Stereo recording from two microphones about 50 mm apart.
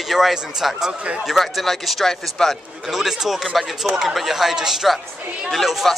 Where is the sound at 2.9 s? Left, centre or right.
Centre.